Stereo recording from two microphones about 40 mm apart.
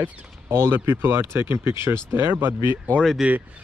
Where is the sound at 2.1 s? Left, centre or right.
Right.